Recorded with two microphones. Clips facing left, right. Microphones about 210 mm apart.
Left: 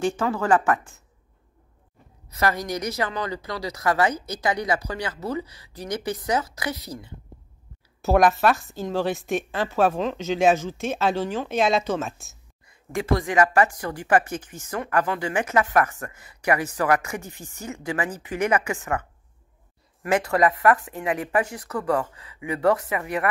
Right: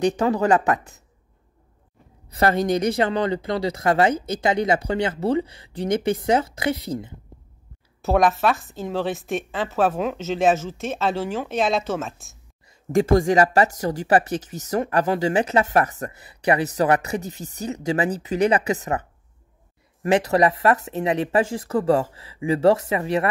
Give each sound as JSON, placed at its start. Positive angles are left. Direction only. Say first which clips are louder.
{"t": 0.0, "sound": "speech", "louder": "right 4 dB", "side_deg": -20}
{"t": 2.2, "sound": "speech", "louder": "right 5 dB", "side_deg": -30}
{"t": 8.0, "sound": "a woman's voice", "louder": "even", "side_deg": 0}
{"t": 12.9, "sound": "speech", "louder": "right 6 dB", "side_deg": -45}